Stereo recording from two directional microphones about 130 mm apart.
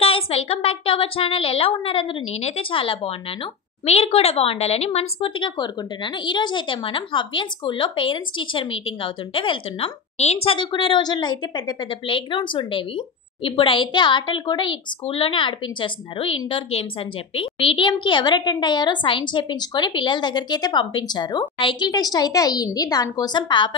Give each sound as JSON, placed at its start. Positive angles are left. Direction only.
{"t": 0.0, "sound": "a woman's voice", "side_deg": 50}
{"t": 10.1, "sound": "speech", "side_deg": 55}